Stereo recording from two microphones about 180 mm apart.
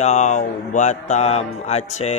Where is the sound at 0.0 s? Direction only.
40° left (ahead or behind).